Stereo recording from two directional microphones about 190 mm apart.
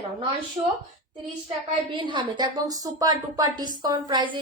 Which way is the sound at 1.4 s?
25° right (ahead or behind).